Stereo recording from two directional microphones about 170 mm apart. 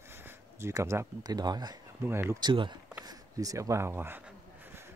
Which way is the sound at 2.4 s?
25° right (ahead or behind).